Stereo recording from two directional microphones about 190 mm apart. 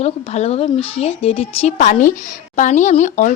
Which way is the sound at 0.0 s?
35° left (ahead or behind).